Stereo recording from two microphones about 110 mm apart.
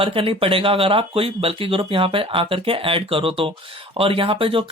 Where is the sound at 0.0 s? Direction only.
55° right (ahead or behind).